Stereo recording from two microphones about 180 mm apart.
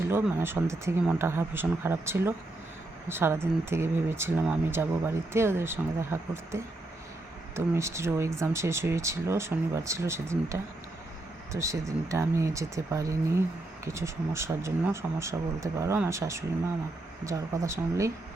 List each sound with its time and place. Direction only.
0.1 s speech: 15° right (ahead or behind)